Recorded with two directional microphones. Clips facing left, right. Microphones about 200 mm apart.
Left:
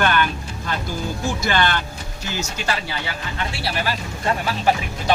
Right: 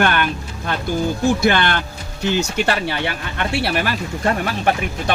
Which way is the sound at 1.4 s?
55° right (ahead or behind).